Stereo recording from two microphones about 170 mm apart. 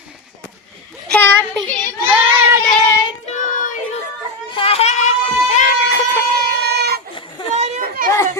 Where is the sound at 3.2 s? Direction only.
50° left (ahead or behind).